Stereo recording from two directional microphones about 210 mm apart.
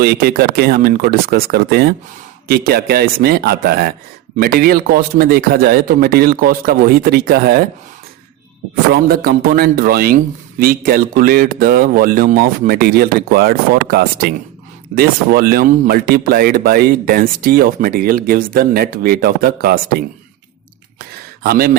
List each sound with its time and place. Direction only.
0.0 s speech: 45° right (ahead or behind)
8.7 s speech: 45° right (ahead or behind)
21.4 s speech: 45° right (ahead or behind)